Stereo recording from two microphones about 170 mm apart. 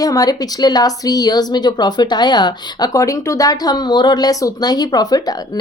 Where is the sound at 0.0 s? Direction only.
20° left (ahead or behind).